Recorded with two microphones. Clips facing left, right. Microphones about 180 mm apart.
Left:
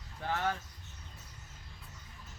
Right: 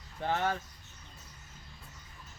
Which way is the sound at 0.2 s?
25° right (ahead or behind).